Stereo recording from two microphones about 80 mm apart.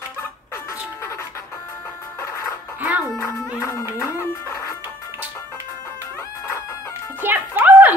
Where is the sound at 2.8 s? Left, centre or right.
Right.